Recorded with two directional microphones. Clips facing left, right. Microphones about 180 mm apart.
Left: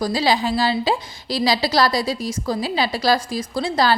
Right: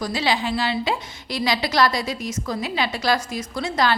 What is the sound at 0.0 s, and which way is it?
A woman's voice, 35° left (ahead or behind).